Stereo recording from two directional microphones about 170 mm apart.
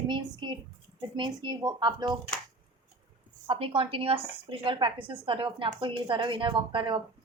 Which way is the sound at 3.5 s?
30° right (ahead or behind).